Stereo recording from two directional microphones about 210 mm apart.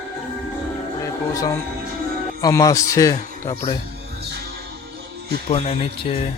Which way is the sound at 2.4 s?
15° left (ahead or behind).